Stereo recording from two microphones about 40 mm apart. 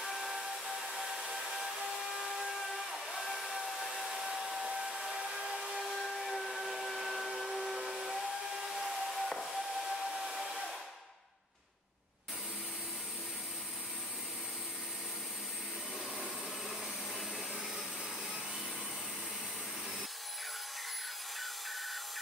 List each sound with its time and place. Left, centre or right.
0.0 s steam whistle: centre
2.0 s a sound: centre
3.7 s hair dryer: centre
5.1 s a sound: centre
5.9 s steam whistle: centre
10.1 s hair dryer: right